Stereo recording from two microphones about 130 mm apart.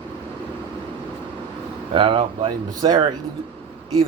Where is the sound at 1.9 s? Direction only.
40° right (ahead or behind).